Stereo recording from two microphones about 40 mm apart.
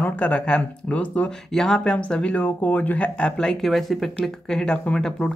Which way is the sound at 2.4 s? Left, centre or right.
Left.